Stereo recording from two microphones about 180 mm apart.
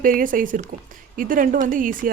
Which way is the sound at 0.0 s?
50° right (ahead or behind).